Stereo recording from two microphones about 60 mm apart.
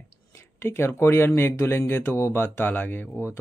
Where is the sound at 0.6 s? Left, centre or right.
Left.